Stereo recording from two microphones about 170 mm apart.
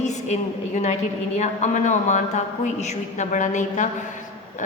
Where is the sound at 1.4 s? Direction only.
45° left (ahead or behind).